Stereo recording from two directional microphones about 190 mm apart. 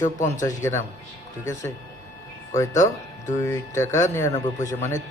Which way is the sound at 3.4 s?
15° left (ahead or behind).